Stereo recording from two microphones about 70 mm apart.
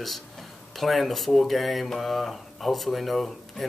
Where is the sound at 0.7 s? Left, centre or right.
Centre.